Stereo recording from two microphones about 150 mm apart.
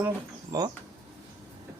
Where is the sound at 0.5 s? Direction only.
25° right (ahead or behind).